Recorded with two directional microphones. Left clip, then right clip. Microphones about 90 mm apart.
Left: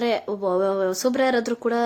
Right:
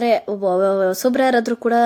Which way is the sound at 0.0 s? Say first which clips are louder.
Right 6 dB; 35° right (ahead or behind).